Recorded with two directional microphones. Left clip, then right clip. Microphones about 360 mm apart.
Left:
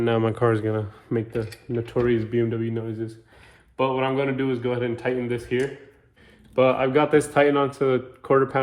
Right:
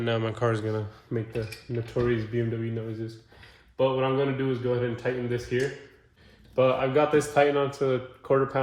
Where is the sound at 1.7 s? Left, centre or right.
Left.